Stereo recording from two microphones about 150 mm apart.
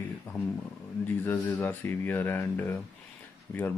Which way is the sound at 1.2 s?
15° left (ahead or behind).